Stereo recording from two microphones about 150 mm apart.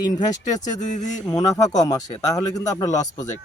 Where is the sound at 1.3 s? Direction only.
20° left (ahead or behind).